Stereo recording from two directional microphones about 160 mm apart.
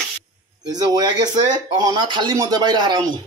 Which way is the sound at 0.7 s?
25° right (ahead or behind).